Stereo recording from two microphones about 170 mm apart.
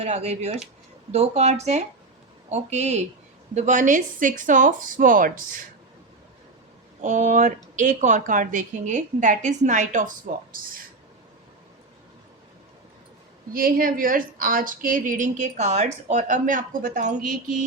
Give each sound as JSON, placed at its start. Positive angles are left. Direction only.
{"t": 0.0, "sound": "a woman's voice", "side_deg": -40}
{"t": 7.0, "sound": "a woman's voice", "side_deg": -45}
{"t": 13.5, "sound": "a woman's voice", "side_deg": -60}